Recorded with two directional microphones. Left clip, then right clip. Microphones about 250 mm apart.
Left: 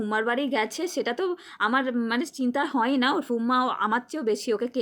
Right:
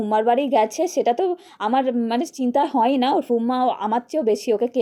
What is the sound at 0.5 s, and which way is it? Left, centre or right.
Speech, left.